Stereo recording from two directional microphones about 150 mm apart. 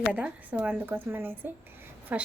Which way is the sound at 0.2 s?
10° right (ahead or behind).